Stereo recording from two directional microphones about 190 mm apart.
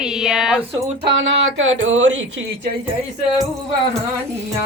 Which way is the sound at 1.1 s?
80° right.